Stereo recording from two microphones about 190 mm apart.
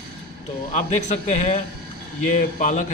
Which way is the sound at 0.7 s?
40° left (ahead or behind).